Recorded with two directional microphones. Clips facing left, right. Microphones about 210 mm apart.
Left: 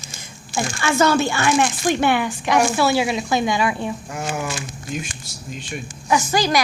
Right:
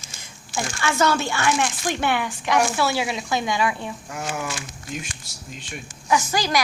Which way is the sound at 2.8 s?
10° left (ahead or behind).